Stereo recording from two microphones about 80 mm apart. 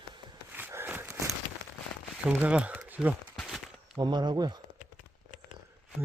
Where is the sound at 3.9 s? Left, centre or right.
Right.